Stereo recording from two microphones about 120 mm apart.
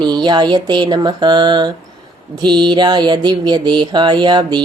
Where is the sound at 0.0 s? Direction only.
40° right (ahead or behind).